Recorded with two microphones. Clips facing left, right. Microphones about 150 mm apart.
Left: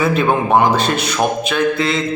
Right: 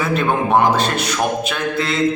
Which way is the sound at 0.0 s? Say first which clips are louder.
Left 3 dB; 5° left (ahead or behind).